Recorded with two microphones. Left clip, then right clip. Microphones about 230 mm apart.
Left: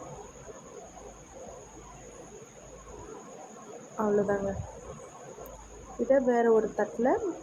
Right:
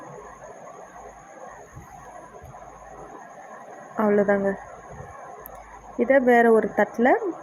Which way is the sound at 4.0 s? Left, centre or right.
Right.